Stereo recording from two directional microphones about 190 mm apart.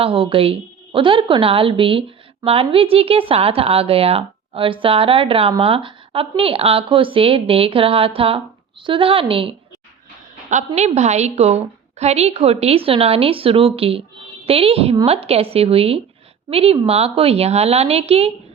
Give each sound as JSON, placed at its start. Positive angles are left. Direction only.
{"t": 0.0, "sound": "a woman's voice", "side_deg": -30}
{"t": 10.8, "sound": "a woman's voice", "side_deg": -35}